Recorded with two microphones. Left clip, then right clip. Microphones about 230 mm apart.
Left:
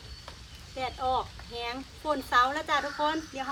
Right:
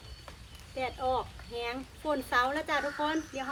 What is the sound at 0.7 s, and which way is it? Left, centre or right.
Speech, centre.